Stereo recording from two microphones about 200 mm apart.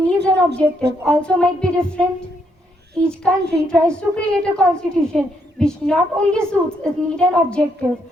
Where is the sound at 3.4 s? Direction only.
55° right (ahead or behind).